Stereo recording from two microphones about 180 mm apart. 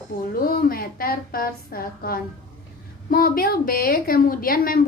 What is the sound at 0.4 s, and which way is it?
A woman's voice, 55° left (ahead or behind).